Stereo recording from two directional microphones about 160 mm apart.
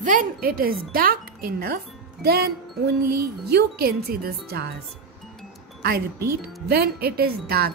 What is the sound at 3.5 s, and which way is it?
Speech, 75° right (ahead or behind).